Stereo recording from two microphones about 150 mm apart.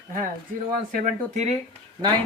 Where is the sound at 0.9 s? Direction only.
50° right (ahead or behind).